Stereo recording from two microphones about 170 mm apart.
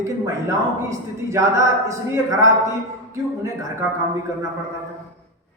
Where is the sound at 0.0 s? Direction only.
20° right (ahead or behind).